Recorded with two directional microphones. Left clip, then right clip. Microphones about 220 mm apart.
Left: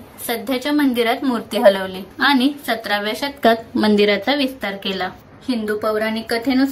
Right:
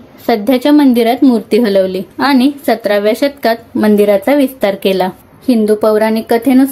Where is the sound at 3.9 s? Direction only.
55° left (ahead or behind).